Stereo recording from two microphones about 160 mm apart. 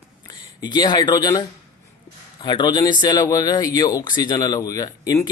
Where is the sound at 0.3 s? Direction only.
30° left (ahead or behind).